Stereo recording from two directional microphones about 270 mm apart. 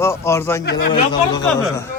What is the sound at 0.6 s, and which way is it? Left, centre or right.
Speech, left.